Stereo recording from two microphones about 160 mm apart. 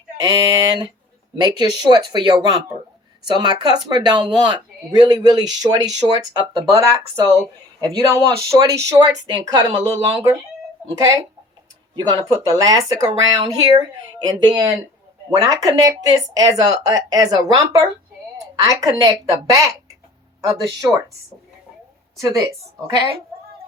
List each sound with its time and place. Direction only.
0.2 s speech: 25° right (ahead or behind)
7.3 s speech: 20° right (ahead or behind)
14.4 s speech: 25° right (ahead or behind)
22.2 s speech: 20° right (ahead or behind)